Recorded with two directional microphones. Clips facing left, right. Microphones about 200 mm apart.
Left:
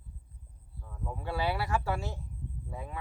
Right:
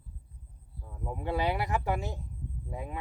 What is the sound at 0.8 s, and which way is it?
Speech, 20° right (ahead or behind).